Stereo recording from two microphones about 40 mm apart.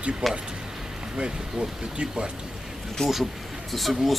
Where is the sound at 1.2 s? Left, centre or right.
Right.